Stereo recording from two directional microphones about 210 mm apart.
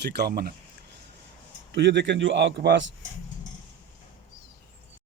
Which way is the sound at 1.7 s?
55° right (ahead or behind).